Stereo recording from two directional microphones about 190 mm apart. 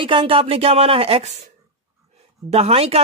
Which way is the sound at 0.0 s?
25° right (ahead or behind).